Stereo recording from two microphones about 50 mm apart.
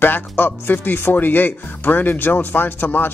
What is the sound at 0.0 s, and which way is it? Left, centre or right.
Speech, left.